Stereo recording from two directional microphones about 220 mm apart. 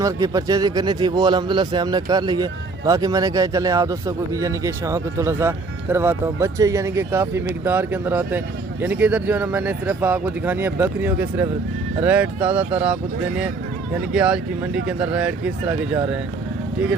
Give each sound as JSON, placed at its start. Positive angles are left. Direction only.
{"t": 0.0, "sound": "a man's voice", "side_deg": -15}